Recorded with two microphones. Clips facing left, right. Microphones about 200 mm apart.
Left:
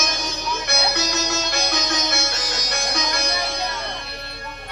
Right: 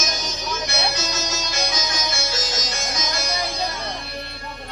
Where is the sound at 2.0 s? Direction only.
60° left (ahead or behind).